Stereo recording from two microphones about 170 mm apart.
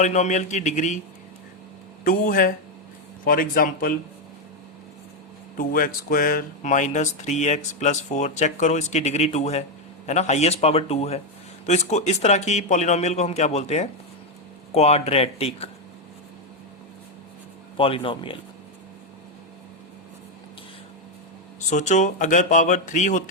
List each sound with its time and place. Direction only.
0.0 s speech: 45° left (ahead or behind)
2.0 s speech: 55° left (ahead or behind)
5.5 s a man's voice: 60° left (ahead or behind); by 15.7 s 35° left (ahead or behind)
17.7 s a man's voice: 30° left (ahead or behind)
21.7 s speech: 45° left (ahead or behind)